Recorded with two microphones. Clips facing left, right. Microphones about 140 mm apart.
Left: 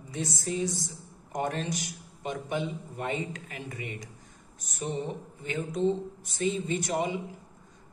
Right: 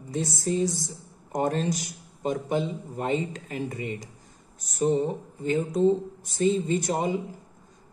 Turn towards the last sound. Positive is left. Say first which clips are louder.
# right 4 dB
turn(degrees=-40)  # may be behind; listen again after turning